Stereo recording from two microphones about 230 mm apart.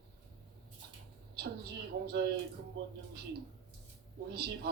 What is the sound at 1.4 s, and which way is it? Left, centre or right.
A woman's voice, right.